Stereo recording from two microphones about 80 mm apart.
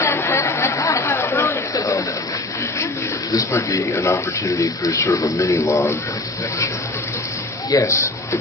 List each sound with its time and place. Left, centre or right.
0.0 s chatter: left
1.7 s a sound: left
3.3 s speech: left
7.7 s speech: left